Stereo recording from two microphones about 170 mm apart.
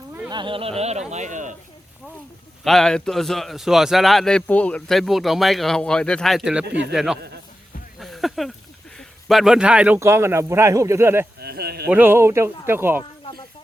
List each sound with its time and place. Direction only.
0.3 s speech: 30° right (ahead or behind); by 1.5 s 45° right (ahead or behind)
2.6 s a man's voice: 5° left (ahead or behind)
6.7 s speech: 75° right (ahead or behind)
6.9 s a man's voice: 5° right (ahead or behind)
7.9 s a sound: centre (ahead or behind)
9.0 s a man's voice: centre (ahead or behind)
11.3 s a sound: 70° right (ahead or behind)
11.9 s a man's voice: 10° right (ahead or behind)